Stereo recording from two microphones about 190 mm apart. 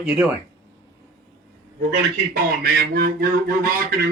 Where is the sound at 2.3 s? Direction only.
55° right (ahead or behind).